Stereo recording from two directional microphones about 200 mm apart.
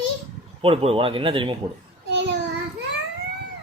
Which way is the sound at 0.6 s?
30° right (ahead or behind).